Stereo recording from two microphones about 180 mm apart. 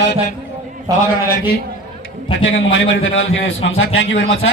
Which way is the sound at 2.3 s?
90° left.